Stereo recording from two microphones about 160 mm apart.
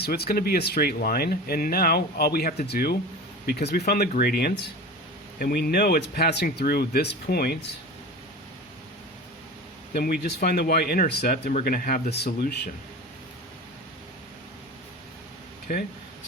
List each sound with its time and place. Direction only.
0.0 s speech: 80° left
2.6 s speech: 85° left
4.2 s speech: 75° left (ahead or behind)
9.9 s speech: 70° left (ahead or behind)
11.6 s speech: 65° left (ahead or behind)
12.1 s speech: 90° left
15.7 s speech: 65° left (ahead or behind)